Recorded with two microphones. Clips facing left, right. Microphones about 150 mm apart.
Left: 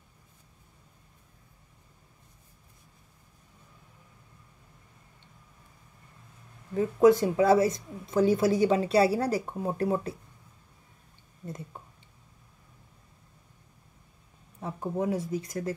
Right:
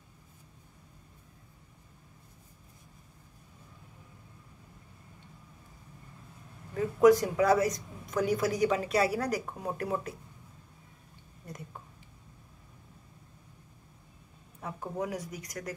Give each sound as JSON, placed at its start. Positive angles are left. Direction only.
{"t": 6.7, "sound": "a woman's voice", "side_deg": 25}
{"t": 14.6, "sound": "speech", "side_deg": 30}